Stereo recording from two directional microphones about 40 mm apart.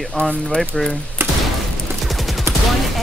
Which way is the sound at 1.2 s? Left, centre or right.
Right.